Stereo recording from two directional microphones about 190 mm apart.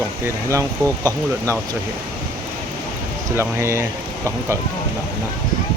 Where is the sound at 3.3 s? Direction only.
15° right (ahead or behind).